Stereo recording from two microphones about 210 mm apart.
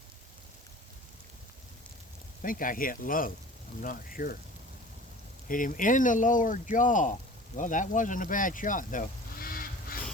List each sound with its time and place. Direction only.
2.4 s speech: 40° left (ahead or behind)
5.5 s speech: 40° left (ahead or behind)